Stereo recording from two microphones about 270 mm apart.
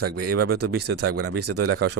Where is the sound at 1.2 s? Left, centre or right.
Right.